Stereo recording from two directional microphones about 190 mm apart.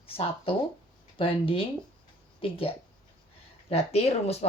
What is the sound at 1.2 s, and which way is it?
Speech, 30° left (ahead or behind).